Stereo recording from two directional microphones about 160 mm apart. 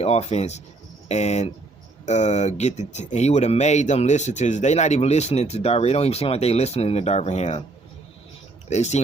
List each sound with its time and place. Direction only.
0.0 s speech: 40° left (ahead or behind)
8.7 s speech: 45° left (ahead or behind)